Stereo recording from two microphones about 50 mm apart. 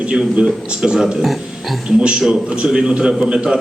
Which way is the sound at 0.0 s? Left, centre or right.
Centre.